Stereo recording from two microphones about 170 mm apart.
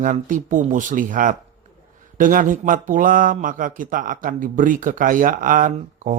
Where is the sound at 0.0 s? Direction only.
50° right (ahead or behind).